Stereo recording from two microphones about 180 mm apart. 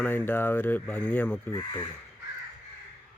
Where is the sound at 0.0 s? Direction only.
10° left (ahead or behind).